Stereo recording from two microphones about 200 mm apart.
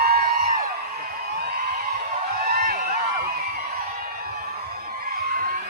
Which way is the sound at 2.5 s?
45° right (ahead or behind).